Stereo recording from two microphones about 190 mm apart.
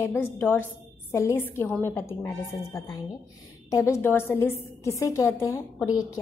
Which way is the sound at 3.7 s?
15° left (ahead or behind).